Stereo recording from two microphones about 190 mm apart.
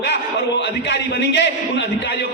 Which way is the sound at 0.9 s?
65° left (ahead or behind).